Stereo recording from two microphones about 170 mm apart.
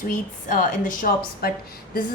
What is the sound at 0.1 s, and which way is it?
A woman's voice, 50° left (ahead or behind).